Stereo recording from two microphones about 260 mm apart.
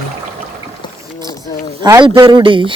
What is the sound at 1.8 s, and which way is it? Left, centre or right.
Speech, centre.